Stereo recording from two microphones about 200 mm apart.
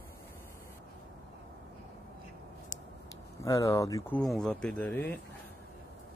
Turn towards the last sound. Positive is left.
turn(degrees=10)  # may be behind; listen again after turning